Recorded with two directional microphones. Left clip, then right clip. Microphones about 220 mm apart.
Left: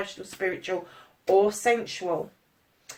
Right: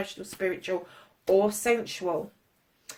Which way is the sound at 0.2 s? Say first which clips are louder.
Even; 45° right (ahead or behind).